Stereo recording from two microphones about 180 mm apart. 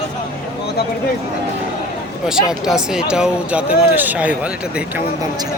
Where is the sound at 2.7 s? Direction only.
5° right (ahead or behind).